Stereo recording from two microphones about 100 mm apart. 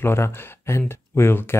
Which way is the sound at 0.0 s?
25° left (ahead or behind).